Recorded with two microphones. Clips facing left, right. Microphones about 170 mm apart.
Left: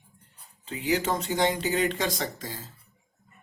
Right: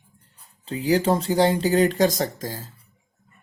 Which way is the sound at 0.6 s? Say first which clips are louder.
Right 6 dB; 35° right (ahead or behind).